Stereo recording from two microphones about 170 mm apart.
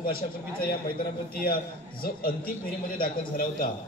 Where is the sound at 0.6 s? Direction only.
60° left (ahead or behind).